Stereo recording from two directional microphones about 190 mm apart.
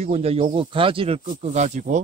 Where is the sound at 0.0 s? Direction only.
30° right (ahead or behind).